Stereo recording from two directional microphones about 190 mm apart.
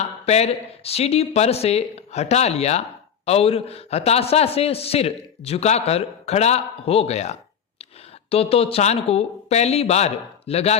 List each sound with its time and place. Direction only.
0.0 s a man's voice: 35° left (ahead or behind)